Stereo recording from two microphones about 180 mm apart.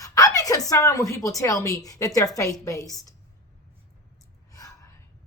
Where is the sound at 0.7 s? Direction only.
15° left (ahead or behind).